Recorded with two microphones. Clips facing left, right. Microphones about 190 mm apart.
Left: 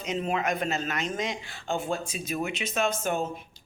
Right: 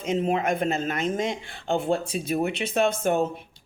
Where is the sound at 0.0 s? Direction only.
50° right (ahead or behind).